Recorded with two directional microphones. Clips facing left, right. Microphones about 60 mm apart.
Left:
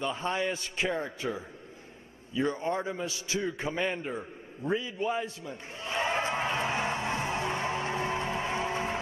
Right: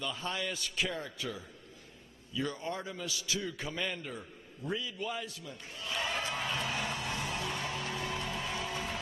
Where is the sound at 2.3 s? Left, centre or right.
Left.